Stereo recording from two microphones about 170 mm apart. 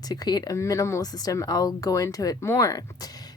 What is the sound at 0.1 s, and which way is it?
Speech, 25° left (ahead or behind).